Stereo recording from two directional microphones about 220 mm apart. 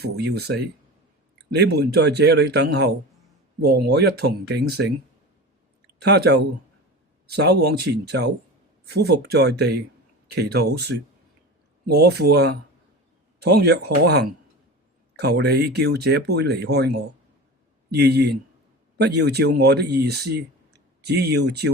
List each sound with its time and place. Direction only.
0.0 s speech: 45° right (ahead or behind)